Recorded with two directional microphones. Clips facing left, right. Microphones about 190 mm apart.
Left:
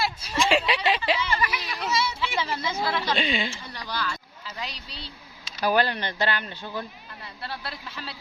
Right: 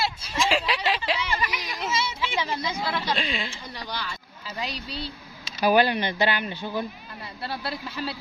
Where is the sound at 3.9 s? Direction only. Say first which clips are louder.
Left 4 dB; 20° right (ahead or behind).